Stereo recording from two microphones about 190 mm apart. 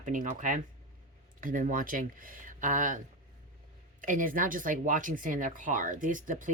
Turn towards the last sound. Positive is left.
turn(degrees=-45)  # may be behind; listen again after turning